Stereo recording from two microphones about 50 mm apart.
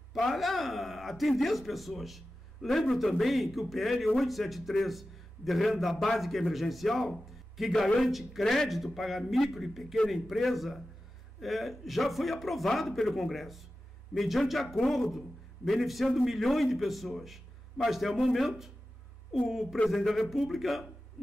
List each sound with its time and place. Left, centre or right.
0.1 s a man's voice: centre